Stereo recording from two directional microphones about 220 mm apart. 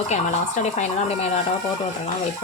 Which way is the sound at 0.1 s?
30° left (ahead or behind).